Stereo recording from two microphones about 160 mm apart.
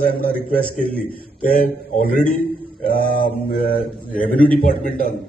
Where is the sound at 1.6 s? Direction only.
65° left (ahead or behind).